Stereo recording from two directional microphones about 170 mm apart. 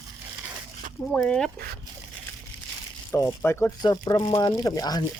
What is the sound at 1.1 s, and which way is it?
Speech, 5° left (ahead or behind).